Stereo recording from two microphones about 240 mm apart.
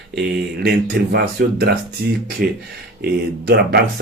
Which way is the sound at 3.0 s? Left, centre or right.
Right.